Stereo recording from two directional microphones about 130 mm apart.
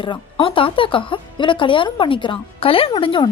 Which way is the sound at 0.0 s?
40° left (ahead or behind).